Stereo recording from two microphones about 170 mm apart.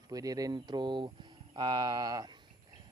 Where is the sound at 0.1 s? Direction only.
20° right (ahead or behind).